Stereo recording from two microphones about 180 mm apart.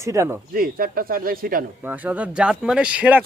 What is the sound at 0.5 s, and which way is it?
Speech, 50° right (ahead or behind).